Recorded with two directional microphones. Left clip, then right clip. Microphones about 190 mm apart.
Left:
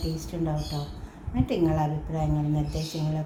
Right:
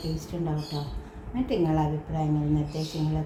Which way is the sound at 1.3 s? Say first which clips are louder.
Even; 30° left (ahead or behind).